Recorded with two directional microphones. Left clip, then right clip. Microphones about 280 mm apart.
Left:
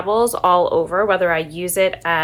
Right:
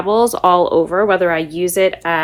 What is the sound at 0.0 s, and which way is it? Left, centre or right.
Speech, right.